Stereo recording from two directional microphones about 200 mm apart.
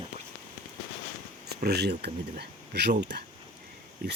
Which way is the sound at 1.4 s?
55° right (ahead or behind).